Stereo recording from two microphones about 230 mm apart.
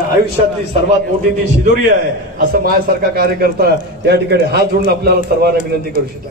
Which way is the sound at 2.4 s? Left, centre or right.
Right.